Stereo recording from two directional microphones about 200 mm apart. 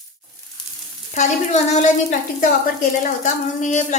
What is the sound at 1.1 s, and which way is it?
Speech, 35° left (ahead or behind).